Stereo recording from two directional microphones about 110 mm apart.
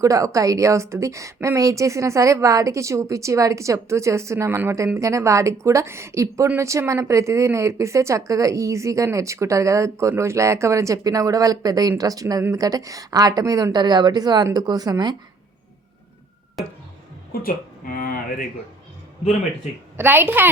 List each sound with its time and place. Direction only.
0.0 s a woman's voice: 30° right (ahead or behind)
20.0 s a woman's voice: 20° right (ahead or behind)